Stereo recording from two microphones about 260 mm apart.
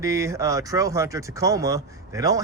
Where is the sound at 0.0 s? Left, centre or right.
Centre.